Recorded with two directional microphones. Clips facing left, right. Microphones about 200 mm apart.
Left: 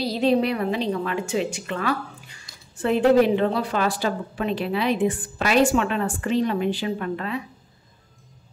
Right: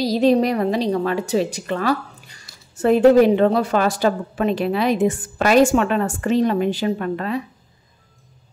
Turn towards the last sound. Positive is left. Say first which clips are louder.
# right 4 dB
turn(degrees=-45)  # may be behind; listen again after turning